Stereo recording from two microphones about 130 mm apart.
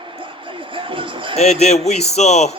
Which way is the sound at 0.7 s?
40° right (ahead or behind).